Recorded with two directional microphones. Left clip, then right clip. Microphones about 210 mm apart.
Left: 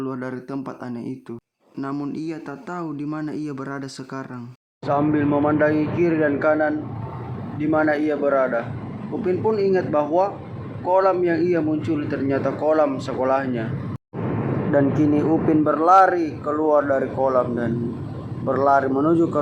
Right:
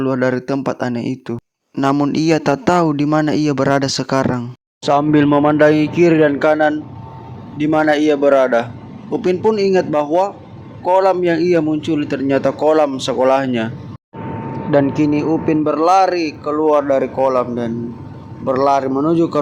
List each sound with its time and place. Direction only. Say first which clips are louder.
0.0 s a man's voice: right 12 dB; 40° right (ahead or behind)
14.9 s a man's voice: right 3 dB; 30° right (ahead or behind)